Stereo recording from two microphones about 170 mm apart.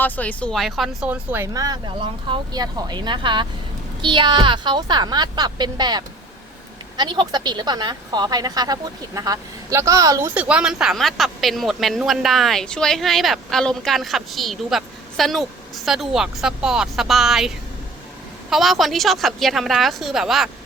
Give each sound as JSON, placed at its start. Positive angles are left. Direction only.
{"t": 0.0, "sound": "a woman's voice", "side_deg": 10}
{"t": 18.5, "sound": "a woman's voice", "side_deg": 0}